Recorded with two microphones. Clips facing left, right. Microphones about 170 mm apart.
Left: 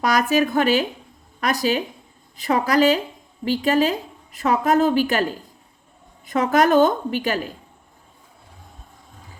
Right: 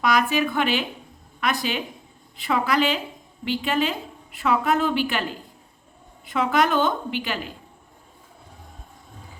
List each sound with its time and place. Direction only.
0.0 s a woman's voice: 40° left (ahead or behind)